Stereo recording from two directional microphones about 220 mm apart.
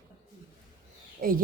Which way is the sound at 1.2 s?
40° right (ahead or behind).